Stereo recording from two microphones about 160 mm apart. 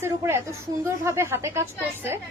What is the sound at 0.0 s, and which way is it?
A woman's voice, 15° right (ahead or behind).